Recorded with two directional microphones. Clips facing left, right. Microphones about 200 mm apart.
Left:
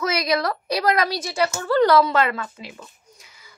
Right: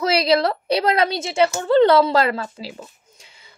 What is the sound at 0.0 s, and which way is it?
A woman's voice, 30° right (ahead or behind).